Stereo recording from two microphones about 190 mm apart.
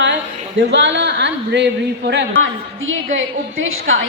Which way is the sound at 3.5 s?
90° right.